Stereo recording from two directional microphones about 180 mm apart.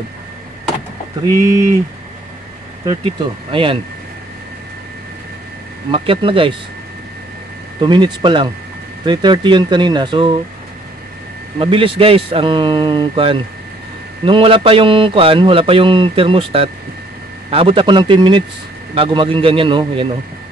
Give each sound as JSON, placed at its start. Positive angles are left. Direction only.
{"t": 2.8, "sound": "speech", "side_deg": -25}
{"t": 5.9, "sound": "speech", "side_deg": -30}
{"t": 7.8, "sound": "speech", "side_deg": -25}
{"t": 11.5, "sound": "speech", "side_deg": -30}